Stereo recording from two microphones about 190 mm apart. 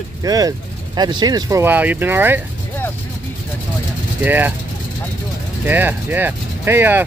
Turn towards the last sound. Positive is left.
turn(degrees=-10)  # may be behind; listen again after turning